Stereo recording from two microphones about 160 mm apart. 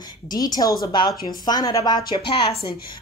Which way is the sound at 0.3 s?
25° left (ahead or behind).